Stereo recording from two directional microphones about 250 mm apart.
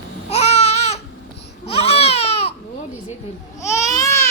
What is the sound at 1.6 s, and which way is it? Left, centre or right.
Baby cry, left.